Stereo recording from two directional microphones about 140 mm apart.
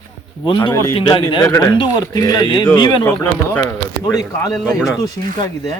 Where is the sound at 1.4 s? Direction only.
25° left (ahead or behind).